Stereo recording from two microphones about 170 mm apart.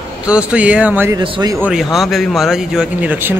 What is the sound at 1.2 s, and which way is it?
Speech, 25° right (ahead or behind).